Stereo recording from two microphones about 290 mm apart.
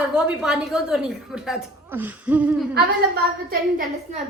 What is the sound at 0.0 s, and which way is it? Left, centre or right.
A woman's voice, centre.